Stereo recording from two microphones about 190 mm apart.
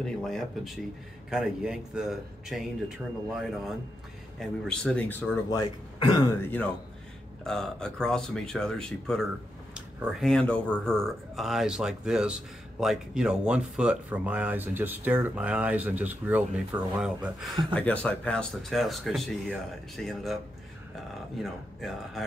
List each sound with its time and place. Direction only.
0.0 s speech: centre (ahead or behind)
5.5 s speech: 20° left (ahead or behind)
7.4 s speech: 5° left (ahead or behind)
17.7 s speech: 5° left (ahead or behind)
21.4 s speech: centre (ahead or behind)